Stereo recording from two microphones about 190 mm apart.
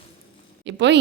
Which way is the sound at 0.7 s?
65° right (ahead or behind).